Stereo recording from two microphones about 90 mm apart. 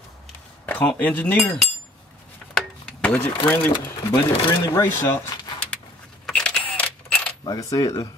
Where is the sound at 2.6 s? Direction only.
10° left (ahead or behind).